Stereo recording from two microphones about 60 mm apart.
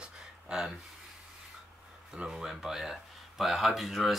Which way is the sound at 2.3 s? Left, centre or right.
Centre.